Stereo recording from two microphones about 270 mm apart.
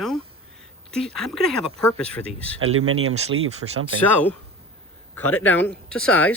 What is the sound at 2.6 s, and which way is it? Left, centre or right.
Speech, right.